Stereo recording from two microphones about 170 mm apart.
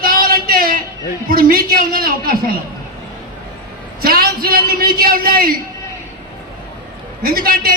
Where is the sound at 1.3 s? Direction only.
55° right (ahead or behind).